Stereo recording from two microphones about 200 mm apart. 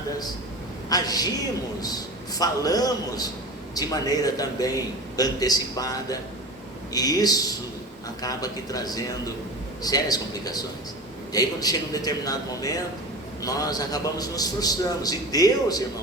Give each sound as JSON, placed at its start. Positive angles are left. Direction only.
{"t": 0.9, "sound": "a man's voice", "side_deg": 20}